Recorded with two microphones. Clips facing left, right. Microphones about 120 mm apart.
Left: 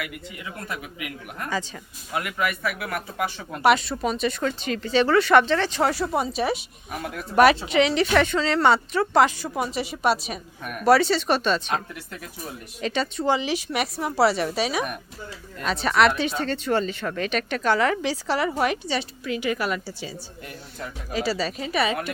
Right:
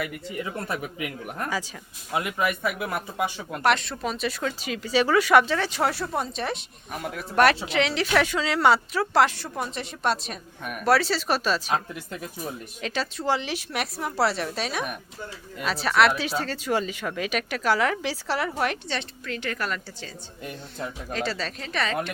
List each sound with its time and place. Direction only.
0.0 s speech: 35° right (ahead or behind)
2.1 s speech: 20° right (ahead or behind)
3.5 s speech: 5° left (ahead or behind)
12.8 s speech: centre (ahead or behind)